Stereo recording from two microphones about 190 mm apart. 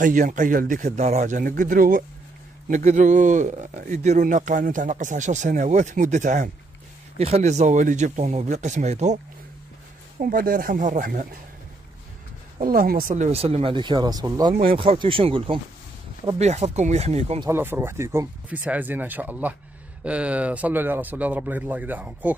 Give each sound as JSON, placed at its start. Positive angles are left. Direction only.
{"t": 0.0, "sound": "a man's voice", "side_deg": -45}
{"t": 10.1, "sound": "a man's voice", "side_deg": -50}
{"t": 12.6, "sound": "speech", "side_deg": -50}
{"t": 14.5, "sound": "a man's voice", "side_deg": -50}
{"t": 14.8, "sound": "speech", "side_deg": -25}
{"t": 17.4, "sound": "speech", "side_deg": -10}